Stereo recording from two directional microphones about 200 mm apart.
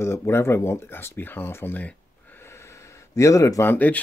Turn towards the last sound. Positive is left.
turn(degrees=10)  # may be behind; listen again after turning